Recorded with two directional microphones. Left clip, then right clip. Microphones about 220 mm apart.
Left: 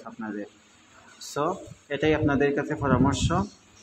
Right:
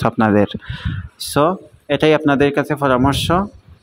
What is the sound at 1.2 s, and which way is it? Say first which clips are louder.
Speech: right 12 dB; 40° right (ahead or behind).